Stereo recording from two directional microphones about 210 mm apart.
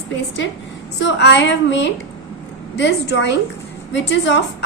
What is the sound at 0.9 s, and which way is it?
A woman's voice, 55° left (ahead or behind).